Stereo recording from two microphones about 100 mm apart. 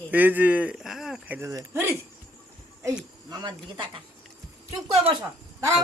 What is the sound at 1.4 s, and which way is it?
Speech, 30° right (ahead or behind).